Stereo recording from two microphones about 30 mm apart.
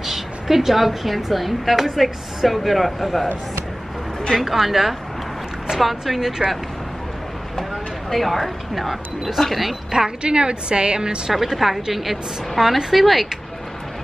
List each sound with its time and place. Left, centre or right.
0.0 s a woman's voice: centre
4.4 s a woman's voice: centre
8.1 s a woman's voice: centre
9.8 s a woman's voice: centre
10.2 s a woman's voice: right
11.4 s a woman's voice: centre